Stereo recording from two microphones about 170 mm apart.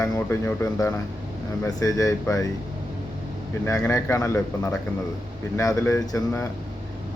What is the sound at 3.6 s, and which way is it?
Speech, 15° left (ahead or behind).